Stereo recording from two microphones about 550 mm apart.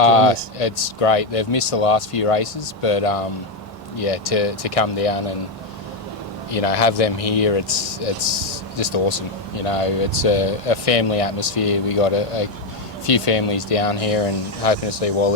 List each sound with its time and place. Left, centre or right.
0.0 s speech: left
6.5 s speech: left